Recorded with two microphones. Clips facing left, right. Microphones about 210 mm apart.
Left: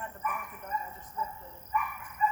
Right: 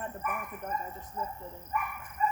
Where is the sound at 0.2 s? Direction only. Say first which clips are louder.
Left 2 dB; 50° right (ahead or behind).